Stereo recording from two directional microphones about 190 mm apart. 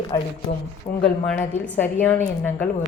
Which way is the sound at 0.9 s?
45° left (ahead or behind).